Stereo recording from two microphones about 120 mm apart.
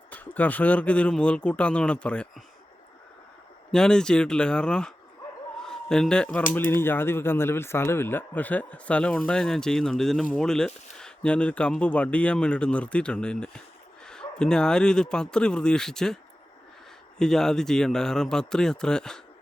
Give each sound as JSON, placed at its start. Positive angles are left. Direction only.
{"t": 0.1, "sound": "speech", "side_deg": 15}
{"t": 3.7, "sound": "speech", "side_deg": 5}
{"t": 17.2, "sound": "speech", "side_deg": 5}